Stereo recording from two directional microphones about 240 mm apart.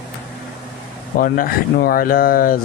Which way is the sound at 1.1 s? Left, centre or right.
Left.